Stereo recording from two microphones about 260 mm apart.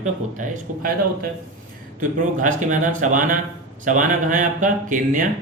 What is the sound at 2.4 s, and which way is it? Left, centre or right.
Speech, right.